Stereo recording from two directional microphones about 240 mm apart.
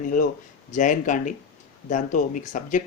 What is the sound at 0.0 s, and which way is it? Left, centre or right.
Speech, left.